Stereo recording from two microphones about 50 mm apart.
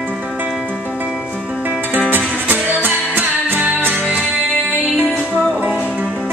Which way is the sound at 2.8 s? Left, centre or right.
Right.